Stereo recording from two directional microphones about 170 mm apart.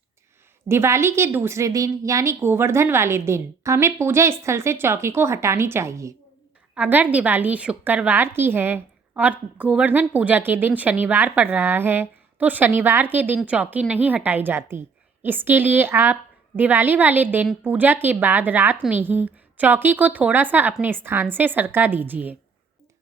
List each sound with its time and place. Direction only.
0.7 s a woman's voice: 15° right (ahead or behind)